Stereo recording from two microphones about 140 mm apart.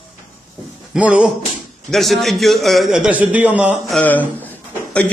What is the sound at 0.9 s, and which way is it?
A man's voice, 10° right (ahead or behind).